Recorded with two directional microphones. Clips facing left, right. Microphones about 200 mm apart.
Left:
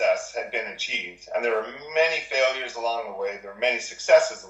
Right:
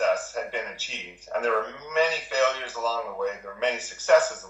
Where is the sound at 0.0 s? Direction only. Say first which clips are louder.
Left 2 dB; 10° left (ahead or behind).